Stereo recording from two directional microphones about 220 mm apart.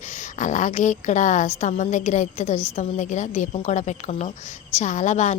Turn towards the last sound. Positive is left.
turn(degrees=30)  # may be behind; listen again after turning